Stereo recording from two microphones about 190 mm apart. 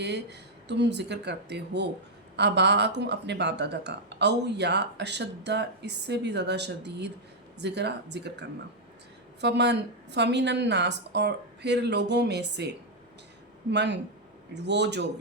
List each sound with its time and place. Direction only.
0.0 s speech: 65° right (ahead or behind)